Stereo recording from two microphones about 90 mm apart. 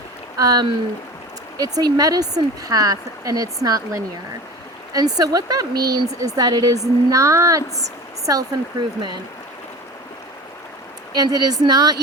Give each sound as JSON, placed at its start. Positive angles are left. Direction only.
{"t": 0.3, "sound": "speech", "side_deg": -45}
{"t": 11.1, "sound": "speech", "side_deg": -50}